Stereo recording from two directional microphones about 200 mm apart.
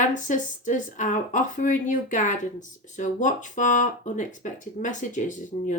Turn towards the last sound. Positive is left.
turn(degrees=40)  # may be behind; listen again after turning